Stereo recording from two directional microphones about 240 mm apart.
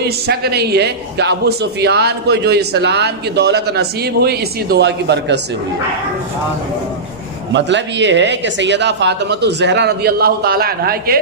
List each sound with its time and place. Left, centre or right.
0.0 s a man's voice: right
7.5 s a man's voice: right